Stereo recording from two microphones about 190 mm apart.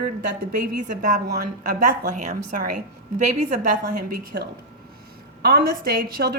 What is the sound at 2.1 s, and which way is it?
Speech, 40° right (ahead or behind).